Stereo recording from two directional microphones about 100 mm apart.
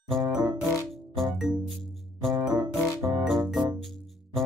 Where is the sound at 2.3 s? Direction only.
40° right (ahead or behind).